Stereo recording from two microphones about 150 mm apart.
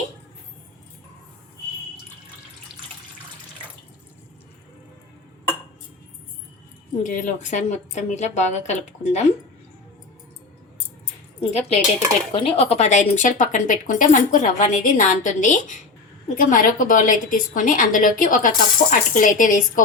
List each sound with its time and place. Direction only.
7.0 s a woman's voice: 55° left (ahead or behind)
11.3 s a woman's voice: 45° left (ahead or behind); by 19.8 s 60° left (ahead or behind)